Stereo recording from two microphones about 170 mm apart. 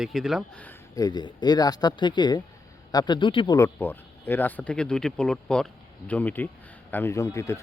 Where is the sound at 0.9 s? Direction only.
25° left (ahead or behind).